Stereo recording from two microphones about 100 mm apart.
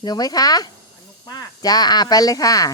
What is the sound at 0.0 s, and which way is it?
Speech, 40° left (ahead or behind).